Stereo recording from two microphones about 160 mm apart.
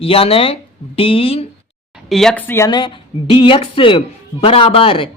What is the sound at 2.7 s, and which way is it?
Speech, 30° left (ahead or behind).